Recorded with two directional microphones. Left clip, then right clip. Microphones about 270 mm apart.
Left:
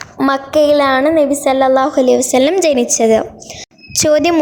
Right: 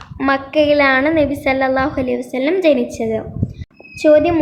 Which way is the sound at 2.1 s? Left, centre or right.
Left.